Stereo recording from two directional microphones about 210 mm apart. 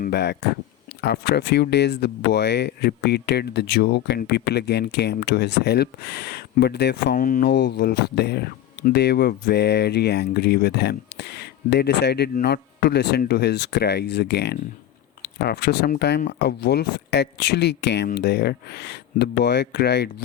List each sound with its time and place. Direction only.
0.0 s speech: 50° left (ahead or behind)